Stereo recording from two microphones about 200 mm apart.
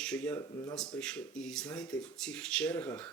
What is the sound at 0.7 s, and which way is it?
Speech, 5° left (ahead or behind).